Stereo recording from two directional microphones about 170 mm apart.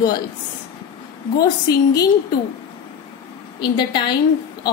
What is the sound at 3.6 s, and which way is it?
Speech, 25° left (ahead or behind).